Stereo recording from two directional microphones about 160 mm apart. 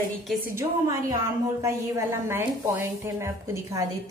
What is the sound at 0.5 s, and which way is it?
A woman's voice, 20° right (ahead or behind).